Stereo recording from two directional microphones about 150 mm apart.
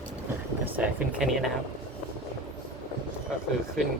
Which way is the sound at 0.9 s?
Centre (ahead or behind).